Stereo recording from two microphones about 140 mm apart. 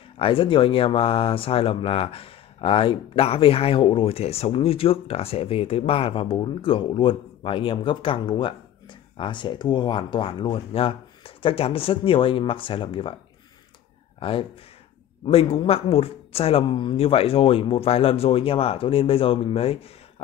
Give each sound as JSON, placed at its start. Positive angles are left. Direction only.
{"t": 0.2, "sound": "speech", "side_deg": 40}
{"t": 14.2, "sound": "speech", "side_deg": 40}